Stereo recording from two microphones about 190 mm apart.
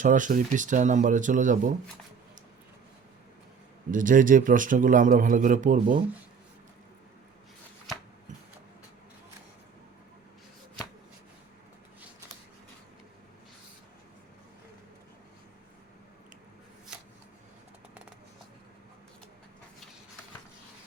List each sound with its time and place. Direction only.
0.0 s speech: 40° right (ahead or behind)
3.9 s a man's voice: 45° right (ahead or behind)